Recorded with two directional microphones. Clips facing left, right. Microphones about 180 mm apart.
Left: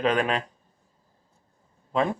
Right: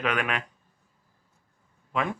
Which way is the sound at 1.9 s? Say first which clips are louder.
Left 4 dB; 30° left (ahead or behind).